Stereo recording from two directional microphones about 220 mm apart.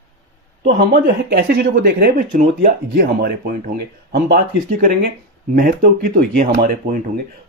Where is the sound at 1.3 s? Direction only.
45° right (ahead or behind).